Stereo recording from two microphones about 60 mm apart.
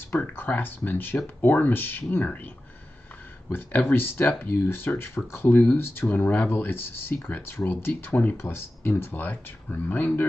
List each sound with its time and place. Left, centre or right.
0.4 s speech: left
3.5 s speech: left